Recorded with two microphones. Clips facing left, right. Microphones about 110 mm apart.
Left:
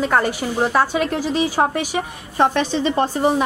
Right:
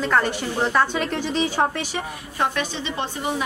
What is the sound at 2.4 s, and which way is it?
A woman's voice, 40° left (ahead or behind).